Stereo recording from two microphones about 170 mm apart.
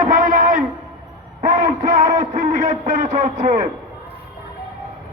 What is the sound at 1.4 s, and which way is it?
Music, 50° right (ahead or behind).